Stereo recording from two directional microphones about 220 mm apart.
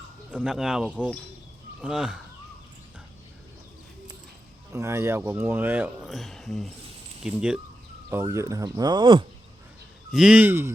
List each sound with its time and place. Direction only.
0.3 s speech: 5° right (ahead or behind)
4.7 s speech: 15° right (ahead or behind)
10.1 s speech: 5° right (ahead or behind)